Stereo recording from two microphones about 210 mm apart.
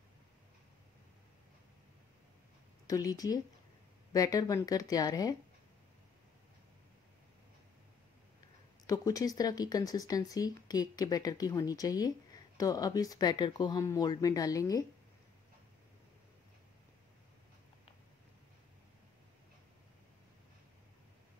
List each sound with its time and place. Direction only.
2.9 s speech: 15° left (ahead or behind)
8.8 s speech: 15° left (ahead or behind)